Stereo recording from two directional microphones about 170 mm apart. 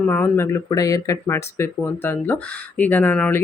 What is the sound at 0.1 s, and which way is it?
Speech, 15° left (ahead or behind).